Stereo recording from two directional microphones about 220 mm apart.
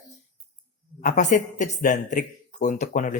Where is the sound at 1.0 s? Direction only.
35° left (ahead or behind).